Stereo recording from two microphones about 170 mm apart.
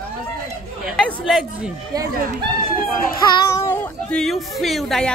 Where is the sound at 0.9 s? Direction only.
Centre (ahead or behind).